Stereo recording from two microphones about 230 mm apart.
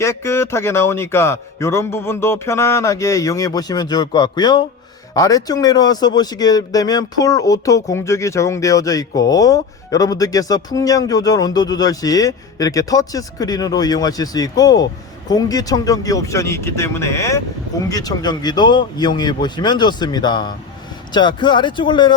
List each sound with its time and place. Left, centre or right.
0.0 s speech: centre